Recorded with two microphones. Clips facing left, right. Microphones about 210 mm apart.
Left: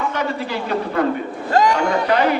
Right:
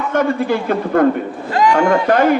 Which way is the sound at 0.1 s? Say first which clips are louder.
Right 7 dB; 50° right (ahead or behind).